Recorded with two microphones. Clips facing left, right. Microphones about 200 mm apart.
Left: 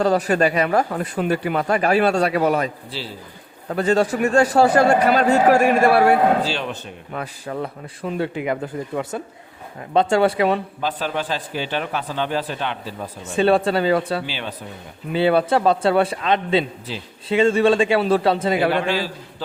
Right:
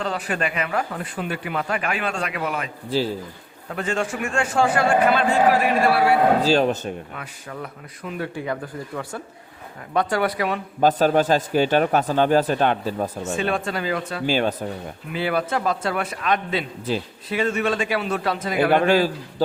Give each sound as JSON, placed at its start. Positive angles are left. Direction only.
{"t": 0.0, "sound": "speech", "side_deg": 40}
{"t": 3.7, "sound": "speech", "side_deg": 35}
{"t": 6.4, "sound": "speech", "side_deg": -40}
{"t": 7.2, "sound": "a man's voice", "side_deg": 35}
{"t": 10.8, "sound": "a man's voice", "side_deg": -45}
{"t": 13.3, "sound": "speech", "side_deg": 35}
{"t": 14.3, "sound": "a man's voice", "side_deg": -45}
{"t": 15.1, "sound": "a man's voice", "side_deg": 30}
{"t": 18.7, "sound": "a man's voice", "side_deg": -50}